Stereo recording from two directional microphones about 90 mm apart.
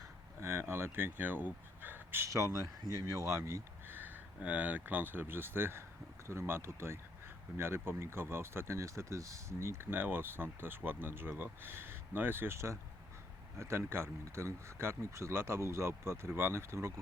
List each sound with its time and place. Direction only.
0.3 s speech: 30° right (ahead or behind)